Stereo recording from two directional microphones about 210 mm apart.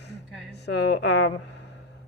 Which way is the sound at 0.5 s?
50° left (ahead or behind).